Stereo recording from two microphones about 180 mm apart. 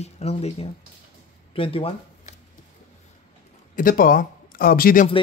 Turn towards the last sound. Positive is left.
turn(degrees=55)  # may be behind; listen again after turning